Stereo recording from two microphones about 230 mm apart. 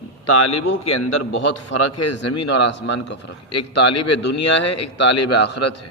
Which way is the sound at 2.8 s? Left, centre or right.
Left.